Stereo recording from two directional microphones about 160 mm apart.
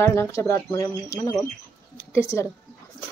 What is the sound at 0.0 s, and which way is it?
A woman's voice, 15° left (ahead or behind).